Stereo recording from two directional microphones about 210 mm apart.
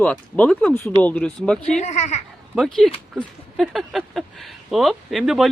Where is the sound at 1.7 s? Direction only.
35° left (ahead or behind).